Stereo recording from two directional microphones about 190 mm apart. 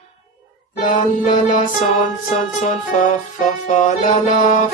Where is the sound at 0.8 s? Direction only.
40° left (ahead or behind).